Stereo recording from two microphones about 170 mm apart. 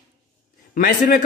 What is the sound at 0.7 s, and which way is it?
Speech, 55° left (ahead or behind).